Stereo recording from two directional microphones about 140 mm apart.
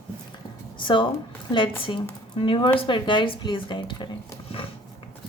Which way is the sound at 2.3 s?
40° left (ahead or behind).